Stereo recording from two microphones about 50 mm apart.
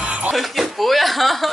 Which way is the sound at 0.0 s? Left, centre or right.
Right.